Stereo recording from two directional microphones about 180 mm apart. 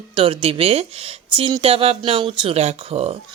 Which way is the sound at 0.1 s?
30° right (ahead or behind).